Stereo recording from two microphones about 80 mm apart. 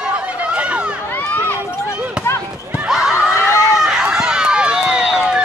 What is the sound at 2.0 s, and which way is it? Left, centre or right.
Chop, centre.